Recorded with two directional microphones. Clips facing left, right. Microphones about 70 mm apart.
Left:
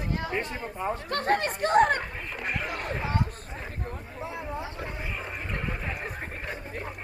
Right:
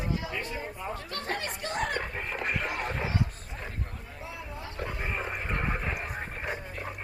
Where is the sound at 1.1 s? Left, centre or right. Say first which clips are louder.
Left 11 dB; left.